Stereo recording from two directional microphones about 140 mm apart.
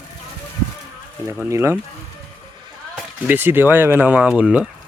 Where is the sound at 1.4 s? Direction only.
20° right (ahead or behind).